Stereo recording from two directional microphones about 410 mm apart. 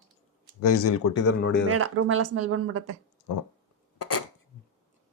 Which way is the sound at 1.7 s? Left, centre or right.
Right.